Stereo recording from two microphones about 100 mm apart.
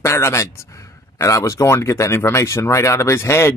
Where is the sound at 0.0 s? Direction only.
25° left (ahead or behind).